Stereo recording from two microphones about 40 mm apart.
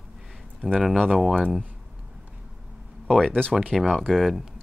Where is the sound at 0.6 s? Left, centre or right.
Left.